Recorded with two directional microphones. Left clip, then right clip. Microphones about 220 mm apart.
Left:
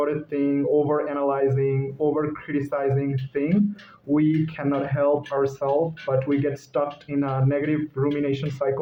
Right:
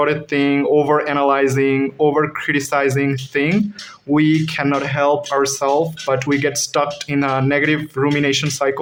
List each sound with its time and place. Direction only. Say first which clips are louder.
0.0 s speech: right 7 dB; 30° right (ahead or behind)